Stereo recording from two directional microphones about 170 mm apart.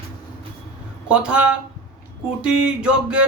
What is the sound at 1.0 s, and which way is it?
Speech, 5° right (ahead or behind).